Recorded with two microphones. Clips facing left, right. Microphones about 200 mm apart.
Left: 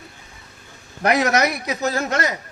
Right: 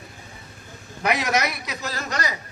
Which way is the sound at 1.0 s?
45° left (ahead or behind).